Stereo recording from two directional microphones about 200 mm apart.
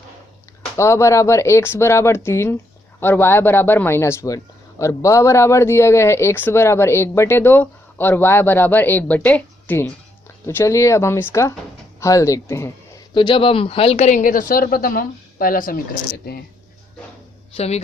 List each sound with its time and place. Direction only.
0.8 s speech: 15° left (ahead or behind)
13.1 s speech: 25° left (ahead or behind); by 16.4 s 50° left (ahead or behind)